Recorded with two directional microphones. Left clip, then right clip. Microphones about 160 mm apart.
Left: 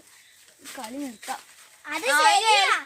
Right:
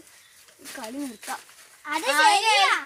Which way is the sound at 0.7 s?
45° right (ahead or behind).